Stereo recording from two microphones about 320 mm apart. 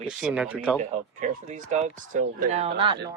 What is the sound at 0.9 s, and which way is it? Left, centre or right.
Speech, right.